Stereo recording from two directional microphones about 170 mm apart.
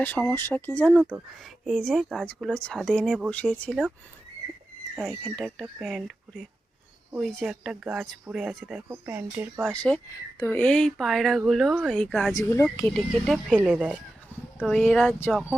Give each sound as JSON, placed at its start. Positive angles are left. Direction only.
{"t": 0.0, "sound": "speech", "side_deg": 10}
{"t": 4.9, "sound": "speech", "side_deg": 5}
{"t": 9.6, "sound": "speech", "side_deg": 5}
{"t": 12.3, "sound": "speech", "side_deg": 20}
{"t": 12.9, "sound": "speech", "side_deg": 0}